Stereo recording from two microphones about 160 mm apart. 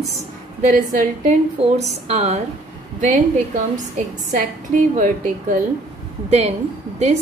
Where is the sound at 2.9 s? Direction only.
55° right (ahead or behind).